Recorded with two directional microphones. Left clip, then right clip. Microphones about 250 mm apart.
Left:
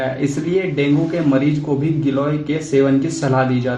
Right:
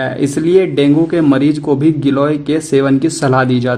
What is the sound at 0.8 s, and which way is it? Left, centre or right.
Speech, right.